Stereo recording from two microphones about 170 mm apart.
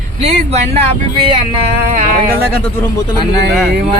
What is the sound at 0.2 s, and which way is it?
Speech, 40° right (ahead or behind).